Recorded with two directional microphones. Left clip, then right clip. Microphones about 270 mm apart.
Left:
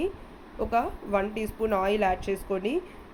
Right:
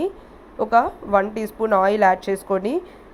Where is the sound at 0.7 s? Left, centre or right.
Centre.